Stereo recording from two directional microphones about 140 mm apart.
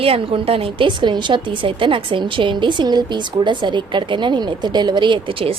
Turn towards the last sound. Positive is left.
turn(degrees=-40)  # may be behind; listen again after turning